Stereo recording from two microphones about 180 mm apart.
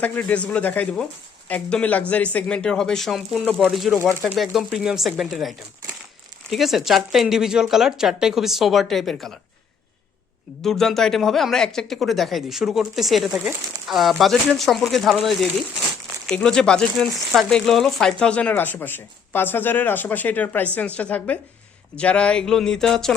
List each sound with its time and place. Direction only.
0.0 s speech: 10° left (ahead or behind)
10.6 s speech: centre (ahead or behind)